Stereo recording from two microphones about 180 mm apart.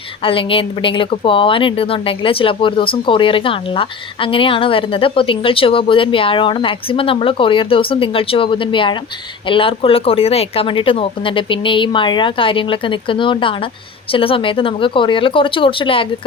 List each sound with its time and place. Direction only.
0.2 s a woman's voice: 30° left (ahead or behind)